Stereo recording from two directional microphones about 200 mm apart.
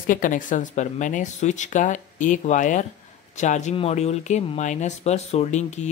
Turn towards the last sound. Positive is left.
turn(degrees=35)  # may be behind; listen again after turning